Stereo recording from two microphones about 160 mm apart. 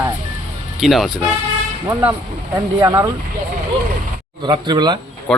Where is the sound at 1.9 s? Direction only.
20° right (ahead or behind).